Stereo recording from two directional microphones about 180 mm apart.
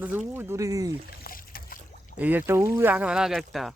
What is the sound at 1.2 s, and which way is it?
Boat, 55° left (ahead or behind).